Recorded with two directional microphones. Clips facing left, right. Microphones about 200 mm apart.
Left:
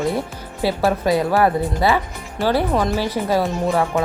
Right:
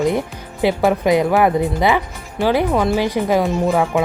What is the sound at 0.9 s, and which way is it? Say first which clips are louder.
A woman's voice: right 2 dB; 15° right (ahead or behind).